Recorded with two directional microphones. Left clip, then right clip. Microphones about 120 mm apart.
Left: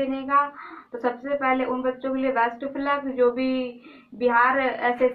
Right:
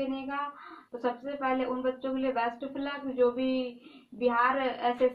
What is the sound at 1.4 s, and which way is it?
A woman's voice, 5° right (ahead or behind).